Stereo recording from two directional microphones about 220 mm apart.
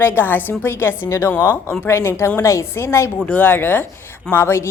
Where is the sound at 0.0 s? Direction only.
10° left (ahead or behind).